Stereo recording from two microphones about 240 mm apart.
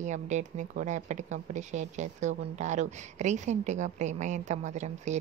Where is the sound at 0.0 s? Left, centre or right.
Right.